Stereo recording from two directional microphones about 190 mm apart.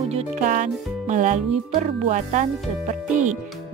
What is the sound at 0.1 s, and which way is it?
Speech, 40° right (ahead or behind).